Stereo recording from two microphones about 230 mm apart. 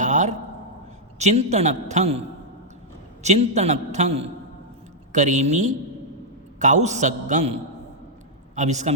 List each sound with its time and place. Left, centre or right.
0.0 s a sound: right
1.2 s a man's voice: right
3.2 s a man's voice: right
8.5 s a man's voice: right